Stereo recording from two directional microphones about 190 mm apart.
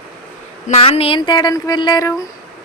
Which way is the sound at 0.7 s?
30° left (ahead or behind).